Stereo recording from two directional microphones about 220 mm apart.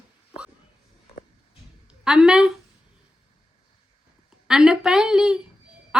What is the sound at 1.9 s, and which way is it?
Speech, 5° right (ahead or behind).